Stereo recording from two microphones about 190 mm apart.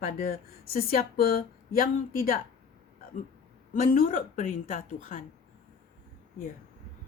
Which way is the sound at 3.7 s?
45° left (ahead or behind).